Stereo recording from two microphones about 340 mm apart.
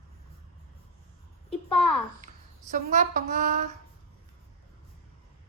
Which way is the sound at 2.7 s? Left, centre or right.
Right.